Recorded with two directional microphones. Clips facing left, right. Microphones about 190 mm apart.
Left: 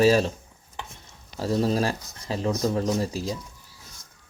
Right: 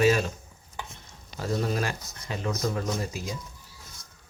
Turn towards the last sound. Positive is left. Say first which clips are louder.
# left 5 dB
turn(degrees=30)  # may be behind; listen again after turning